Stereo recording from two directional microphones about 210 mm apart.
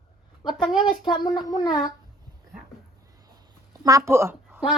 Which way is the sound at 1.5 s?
20° left (ahead or behind).